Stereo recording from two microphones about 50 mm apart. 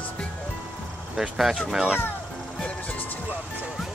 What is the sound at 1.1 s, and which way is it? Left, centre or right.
Speech, centre.